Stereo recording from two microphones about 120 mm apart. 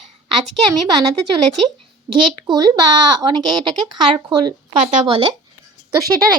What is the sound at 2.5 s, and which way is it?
Speech, 35° right (ahead or behind).